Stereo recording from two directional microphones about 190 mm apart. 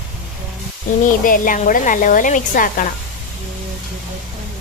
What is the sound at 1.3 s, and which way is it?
A woman's voice, 45° left (ahead or behind).